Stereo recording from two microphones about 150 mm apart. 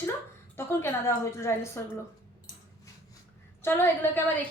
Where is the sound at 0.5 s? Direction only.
15° left (ahead or behind).